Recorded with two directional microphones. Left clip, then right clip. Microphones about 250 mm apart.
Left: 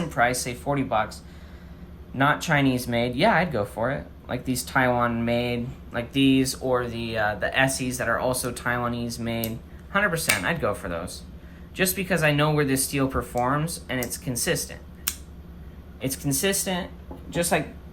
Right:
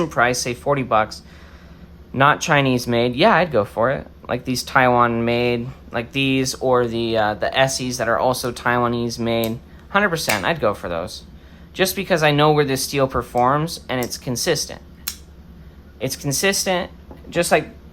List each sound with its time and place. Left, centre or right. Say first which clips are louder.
0.1 s speech: right 5 dB; right
16.0 s speech: right 5 dB; right